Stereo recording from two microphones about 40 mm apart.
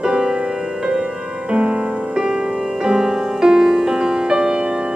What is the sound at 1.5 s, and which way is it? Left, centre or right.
Music, right.